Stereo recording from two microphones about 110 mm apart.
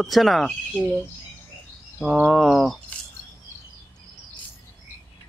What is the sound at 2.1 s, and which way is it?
Speech, centre (ahead or behind).